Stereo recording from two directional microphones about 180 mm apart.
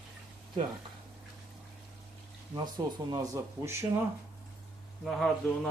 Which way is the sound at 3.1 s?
20° right (ahead or behind).